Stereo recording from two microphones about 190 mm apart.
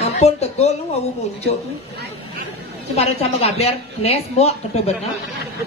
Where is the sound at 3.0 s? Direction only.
35° left (ahead or behind).